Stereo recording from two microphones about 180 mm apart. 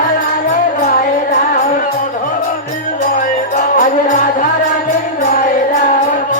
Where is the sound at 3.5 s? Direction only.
45° left (ahead or behind).